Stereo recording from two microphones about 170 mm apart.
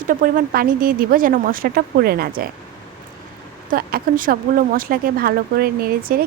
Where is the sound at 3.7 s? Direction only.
55° right (ahead or behind).